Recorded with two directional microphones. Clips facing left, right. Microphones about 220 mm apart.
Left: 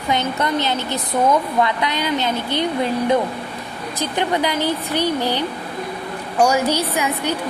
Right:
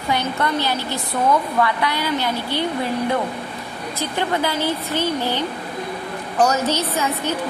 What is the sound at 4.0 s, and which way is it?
A woman's voice, 20° left (ahead or behind).